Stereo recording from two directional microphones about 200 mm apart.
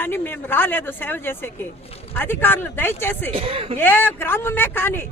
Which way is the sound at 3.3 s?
30° right (ahead or behind).